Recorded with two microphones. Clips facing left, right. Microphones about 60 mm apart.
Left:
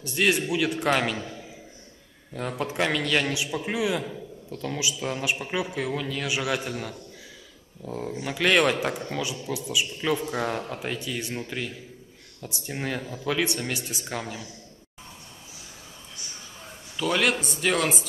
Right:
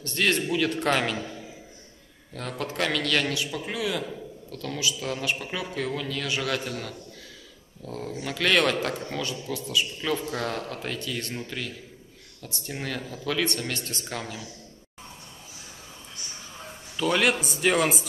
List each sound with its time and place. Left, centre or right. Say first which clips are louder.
0.0 s a man's voice: left 1 dB; centre
2.3 s a man's voice: left 3 dB; centre
16.9 s a man's voice: right 1 dB; centre